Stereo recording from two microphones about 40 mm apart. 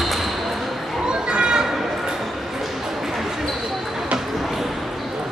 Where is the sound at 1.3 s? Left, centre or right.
Right.